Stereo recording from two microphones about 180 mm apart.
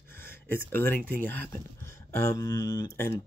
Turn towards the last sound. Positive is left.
turn(degrees=15)  # may be behind; listen again after turning